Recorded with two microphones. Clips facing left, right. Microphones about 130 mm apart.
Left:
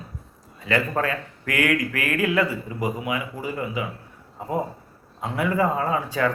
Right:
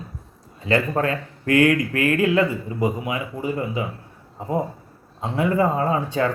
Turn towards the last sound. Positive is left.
turn(degrees=-30)  # may be behind; listen again after turning